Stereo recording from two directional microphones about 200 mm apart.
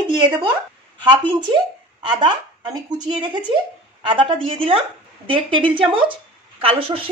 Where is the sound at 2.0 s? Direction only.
20° right (ahead or behind).